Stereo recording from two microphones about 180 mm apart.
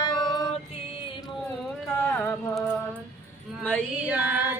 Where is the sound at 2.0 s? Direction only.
5° left (ahead or behind).